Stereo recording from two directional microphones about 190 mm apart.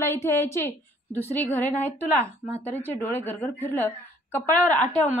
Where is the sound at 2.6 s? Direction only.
10° left (ahead or behind).